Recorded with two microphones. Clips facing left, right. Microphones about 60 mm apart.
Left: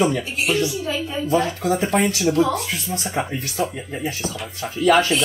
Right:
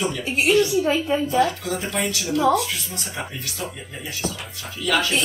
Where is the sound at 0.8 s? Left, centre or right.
Right.